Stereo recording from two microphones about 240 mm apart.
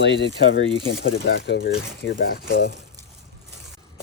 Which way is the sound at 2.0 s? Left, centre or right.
Left.